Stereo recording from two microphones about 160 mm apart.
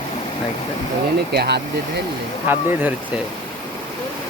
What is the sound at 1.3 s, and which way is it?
Speech, 90° right.